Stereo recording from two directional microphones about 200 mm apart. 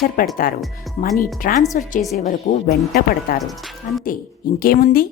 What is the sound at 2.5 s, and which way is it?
Speech, 30° left (ahead or behind).